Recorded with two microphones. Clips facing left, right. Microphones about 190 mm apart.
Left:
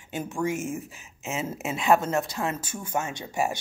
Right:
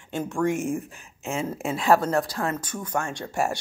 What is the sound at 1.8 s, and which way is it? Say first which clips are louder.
Speech: right 2 dB; 20° left (ahead or behind).